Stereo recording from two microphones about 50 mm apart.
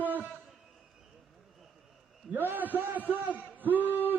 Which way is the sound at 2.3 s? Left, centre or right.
Right.